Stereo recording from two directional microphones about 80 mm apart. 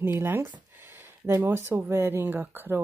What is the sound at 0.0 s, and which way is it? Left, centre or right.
Speech, right.